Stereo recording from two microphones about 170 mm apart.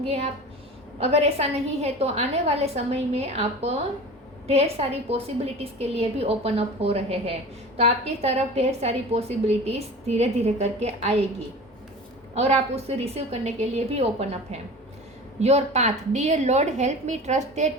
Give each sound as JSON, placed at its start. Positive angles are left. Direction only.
{"t": 0.0, "sound": "a woman's voice", "side_deg": -40}
{"t": 12.3, "sound": "a woman's voice", "side_deg": -40}